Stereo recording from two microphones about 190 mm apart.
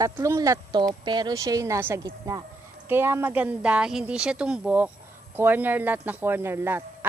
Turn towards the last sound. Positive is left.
turn(degrees=-10)  # may be behind; listen again after turning